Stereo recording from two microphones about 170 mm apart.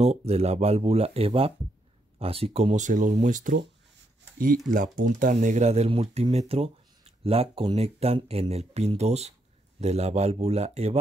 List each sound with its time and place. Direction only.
0.0 s speech: 40° right (ahead or behind)
4.6 s speech: 50° right (ahead or behind)